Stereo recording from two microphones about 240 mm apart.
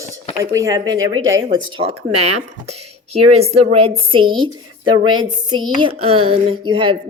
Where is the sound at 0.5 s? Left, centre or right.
Centre.